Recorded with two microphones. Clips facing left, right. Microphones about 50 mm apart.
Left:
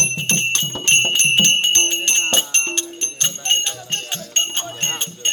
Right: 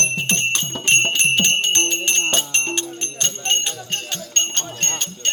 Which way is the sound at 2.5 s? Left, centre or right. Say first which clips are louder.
Even; centre.